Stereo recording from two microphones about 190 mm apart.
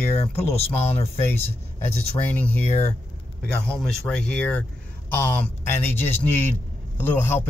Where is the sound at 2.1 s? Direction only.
10° left (ahead or behind).